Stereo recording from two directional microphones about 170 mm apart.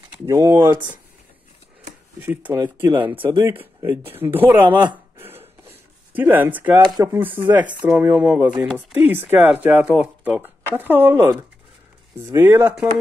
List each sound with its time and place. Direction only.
0.3 s speech: 20° right (ahead or behind)
2.1 s speech: 10° right (ahead or behind)
5.2 s a sound: 15° right (ahead or behind)
7.0 s speech: 15° right (ahead or behind)